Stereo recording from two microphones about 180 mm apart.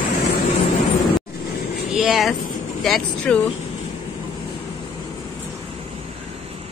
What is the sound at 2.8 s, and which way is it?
Speech, 5° left (ahead or behind).